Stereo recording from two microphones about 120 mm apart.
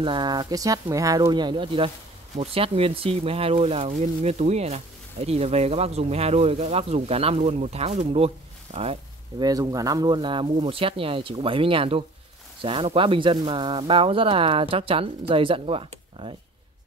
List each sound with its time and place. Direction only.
0.0 s speech: 40° right (ahead or behind)
2.3 s speech: 55° right (ahead or behind)
8.7 s speech: 80° right
9.4 s speech: 30° right (ahead or behind); by 15.9 s 50° right (ahead or behind)
16.2 s speech: 40° right (ahead or behind)